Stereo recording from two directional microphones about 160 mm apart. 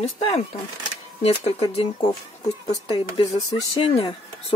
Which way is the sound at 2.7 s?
30° left (ahead or behind).